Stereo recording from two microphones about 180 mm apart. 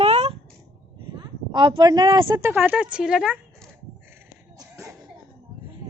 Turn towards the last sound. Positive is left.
turn(degrees=-15)  # may be behind; listen again after turning